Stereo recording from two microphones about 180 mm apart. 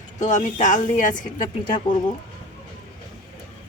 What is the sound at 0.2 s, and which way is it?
Speech, 45° left (ahead or behind).